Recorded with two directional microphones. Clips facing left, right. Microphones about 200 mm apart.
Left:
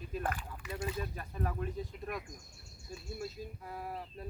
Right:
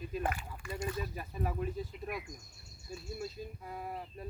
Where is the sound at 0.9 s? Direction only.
5° right (ahead or behind).